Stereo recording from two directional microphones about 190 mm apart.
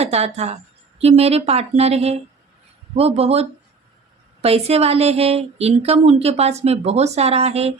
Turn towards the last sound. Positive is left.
turn(degrees=-35)  # may be behind; listen again after turning